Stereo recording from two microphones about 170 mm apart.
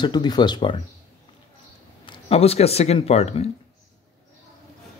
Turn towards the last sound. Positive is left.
turn(degrees=35)  # may be behind; listen again after turning